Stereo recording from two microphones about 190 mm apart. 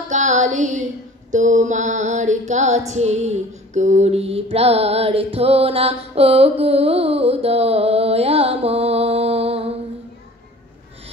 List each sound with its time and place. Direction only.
0.1 s child singing: 40° right (ahead or behind)
1.3 s music: 40° right (ahead or behind)
2.9 s female singing: 35° right (ahead or behind)